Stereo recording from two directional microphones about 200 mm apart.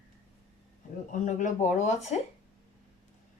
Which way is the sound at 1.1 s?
40° left (ahead or behind).